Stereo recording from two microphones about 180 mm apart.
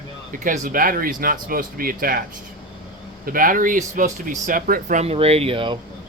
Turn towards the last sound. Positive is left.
turn(degrees=-30)  # may be behind; listen again after turning